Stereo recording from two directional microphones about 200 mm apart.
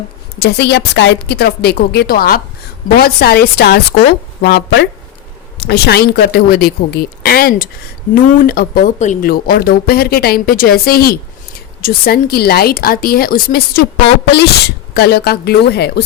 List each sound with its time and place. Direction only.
0.3 s a woman's voice: 55° left (ahead or behind)
14.9 s speech: 55° left (ahead or behind)